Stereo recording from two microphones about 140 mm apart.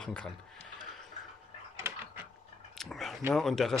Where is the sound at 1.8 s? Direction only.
15° right (ahead or behind).